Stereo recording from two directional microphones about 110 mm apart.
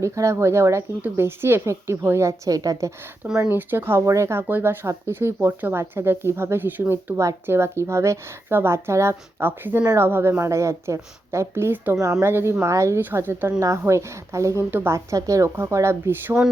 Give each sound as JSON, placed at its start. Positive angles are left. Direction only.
{"t": 0.0, "sound": "a woman's voice", "side_deg": -25}
{"t": 3.5, "sound": "a woman's voice", "side_deg": -20}